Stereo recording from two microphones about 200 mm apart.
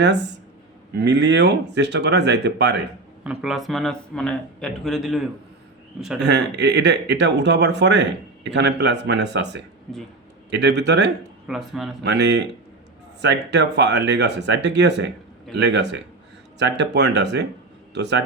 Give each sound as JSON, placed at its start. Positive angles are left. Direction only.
{"t": 0.9, "sound": "speech", "side_deg": -60}
{"t": 3.2, "sound": "speech", "side_deg": 0}
{"t": 6.1, "sound": "speech", "side_deg": -55}
{"t": 11.4, "sound": "speech", "side_deg": 0}
{"t": 12.0, "sound": "speech", "side_deg": -60}